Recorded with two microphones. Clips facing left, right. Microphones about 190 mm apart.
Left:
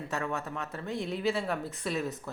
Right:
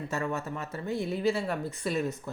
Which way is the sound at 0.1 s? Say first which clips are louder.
Right 1 dB; centre (ahead or behind).